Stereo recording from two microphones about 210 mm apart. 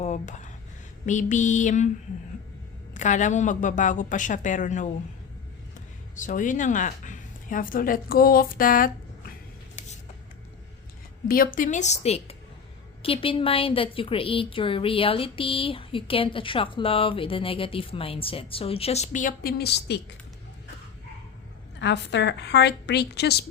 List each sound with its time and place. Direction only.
0.0 s a sound: 35° left (ahead or behind)
1.0 s speech: 35° left (ahead or behind)
2.9 s speech: 35° left (ahead or behind)
6.1 s speech: 40° left (ahead or behind)
11.3 s a woman's voice: 40° left (ahead or behind)
21.8 s a woman's voice: 55° left (ahead or behind)